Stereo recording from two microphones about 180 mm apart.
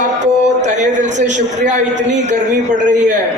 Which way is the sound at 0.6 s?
40° right (ahead or behind).